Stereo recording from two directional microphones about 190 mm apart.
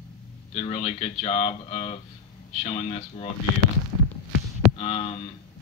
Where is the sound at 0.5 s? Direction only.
30° left (ahead or behind).